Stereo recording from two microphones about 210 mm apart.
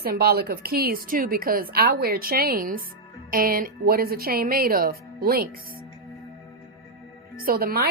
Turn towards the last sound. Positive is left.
turn(degrees=-45)  # may be behind; listen again after turning